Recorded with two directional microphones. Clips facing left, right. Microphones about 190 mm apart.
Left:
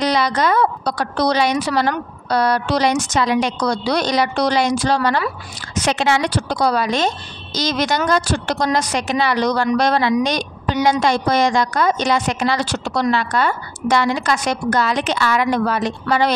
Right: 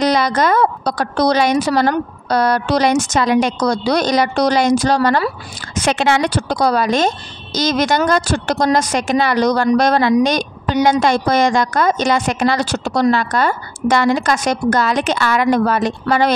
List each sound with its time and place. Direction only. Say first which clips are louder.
0.0 s speech: right 3 dB; 45° right (ahead or behind)
5.8 s speech: right 2 dB; 55° right (ahead or behind)